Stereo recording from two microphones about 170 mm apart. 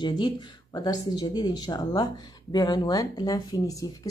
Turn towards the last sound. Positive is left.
turn(degrees=20)  # may be behind; listen again after turning